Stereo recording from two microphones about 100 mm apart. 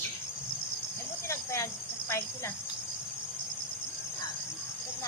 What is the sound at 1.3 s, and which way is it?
Insect, 30° left (ahead or behind).